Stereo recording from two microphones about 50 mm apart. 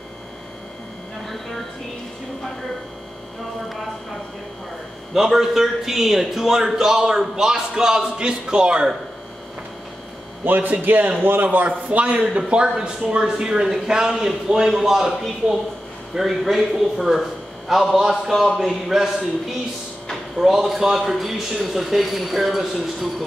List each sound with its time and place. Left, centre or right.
1.3 s a sound: centre
5.1 s a man's voice: centre
10.4 s a man's voice: right; by 16.8 s centre
17.9 s a man's voice: centre
20.3 s a man's voice: centre